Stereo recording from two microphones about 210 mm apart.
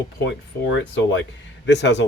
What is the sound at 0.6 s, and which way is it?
Speech, 55° left (ahead or behind).